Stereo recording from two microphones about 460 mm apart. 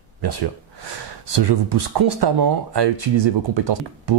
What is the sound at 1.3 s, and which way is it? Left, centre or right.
Speech, right.